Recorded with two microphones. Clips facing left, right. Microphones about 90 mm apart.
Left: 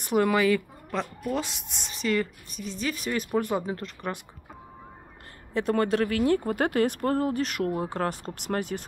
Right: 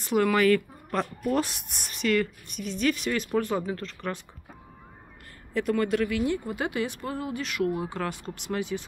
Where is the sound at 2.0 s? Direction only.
35° left (ahead or behind).